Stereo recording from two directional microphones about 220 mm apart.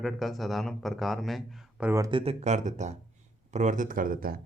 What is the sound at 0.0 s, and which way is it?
Speech, centre (ahead or behind).